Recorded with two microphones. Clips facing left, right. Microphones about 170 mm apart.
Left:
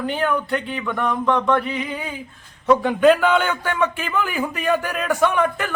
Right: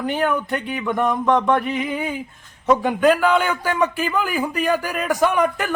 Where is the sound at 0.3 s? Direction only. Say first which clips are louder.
Even; 15° right (ahead or behind).